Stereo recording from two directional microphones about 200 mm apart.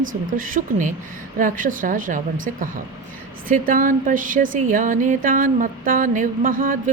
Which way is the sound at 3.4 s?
45° right (ahead or behind).